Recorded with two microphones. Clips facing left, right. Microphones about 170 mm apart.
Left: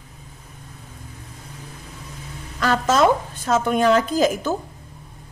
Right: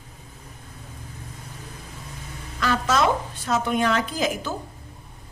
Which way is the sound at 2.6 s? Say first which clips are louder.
Left 4 dB; 45° left (ahead or behind).